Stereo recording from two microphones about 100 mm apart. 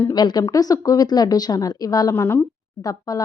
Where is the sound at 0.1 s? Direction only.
45° left (ahead or behind).